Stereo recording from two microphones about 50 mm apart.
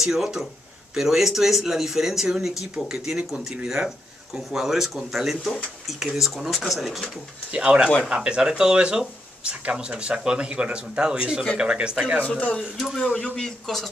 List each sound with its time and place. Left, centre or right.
0.0 s speech: centre
7.5 s speech: centre
12.3 s speech: left